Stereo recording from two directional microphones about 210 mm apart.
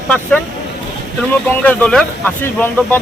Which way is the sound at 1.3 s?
5° left (ahead or behind).